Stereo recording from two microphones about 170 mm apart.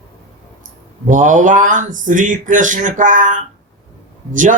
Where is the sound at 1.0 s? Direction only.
50° right (ahead or behind).